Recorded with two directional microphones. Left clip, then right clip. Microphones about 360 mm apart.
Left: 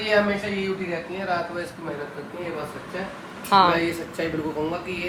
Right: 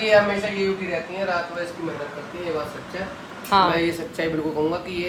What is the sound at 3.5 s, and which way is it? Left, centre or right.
Speech, centre.